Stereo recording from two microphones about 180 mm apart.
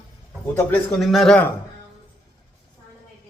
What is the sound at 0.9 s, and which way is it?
Speech, centre (ahead or behind).